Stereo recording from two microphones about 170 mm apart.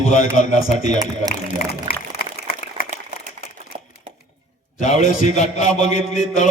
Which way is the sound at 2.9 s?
50° right (ahead or behind).